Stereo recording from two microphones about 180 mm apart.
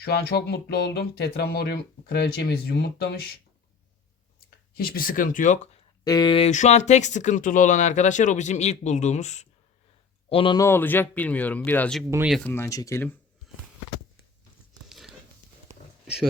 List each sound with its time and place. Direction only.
0.0 s speech: 60° left (ahead or behind)
4.7 s speech: 55° left (ahead or behind)
6.1 s speech: 25° left (ahead or behind); by 9.5 s 40° left (ahead or behind)
10.2 s speech: 30° left (ahead or behind)
10.6 s speech: 10° left (ahead or behind)
14.8 s crumpling: centre (ahead or behind)